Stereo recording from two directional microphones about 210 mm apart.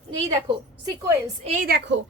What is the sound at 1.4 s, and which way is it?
Speech, 40° right (ahead or behind).